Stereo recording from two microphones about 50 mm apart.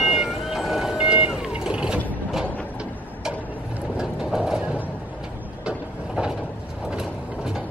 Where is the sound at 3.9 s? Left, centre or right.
Centre.